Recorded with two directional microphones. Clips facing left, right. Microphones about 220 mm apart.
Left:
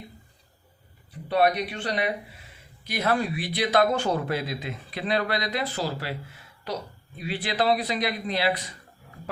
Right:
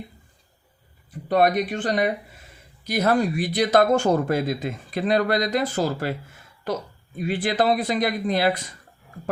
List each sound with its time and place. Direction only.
1.3 s speech: 45° right (ahead or behind)